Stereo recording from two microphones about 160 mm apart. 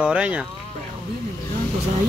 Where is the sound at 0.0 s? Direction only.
5° right (ahead or behind).